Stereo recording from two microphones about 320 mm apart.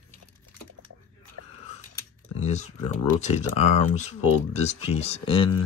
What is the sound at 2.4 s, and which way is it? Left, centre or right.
Speech, left.